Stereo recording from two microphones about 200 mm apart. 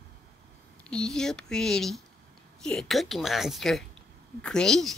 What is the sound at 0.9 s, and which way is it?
A woman's voice, 5° left (ahead or behind).